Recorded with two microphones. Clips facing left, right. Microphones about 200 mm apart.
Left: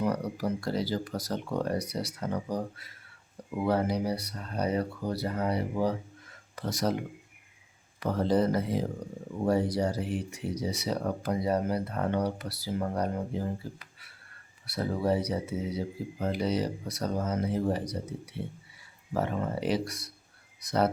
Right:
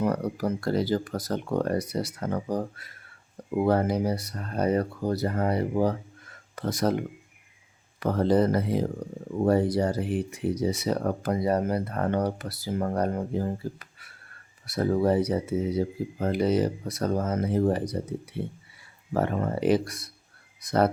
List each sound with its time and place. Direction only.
0.0 s speech: 50° right (ahead or behind)
7.9 s speech: 55° right (ahead or behind)